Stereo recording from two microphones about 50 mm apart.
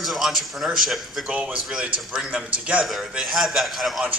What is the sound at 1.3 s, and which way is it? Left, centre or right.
Speech, right.